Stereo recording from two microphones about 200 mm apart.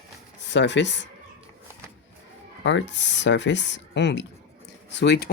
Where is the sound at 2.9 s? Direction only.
60° left (ahead or behind).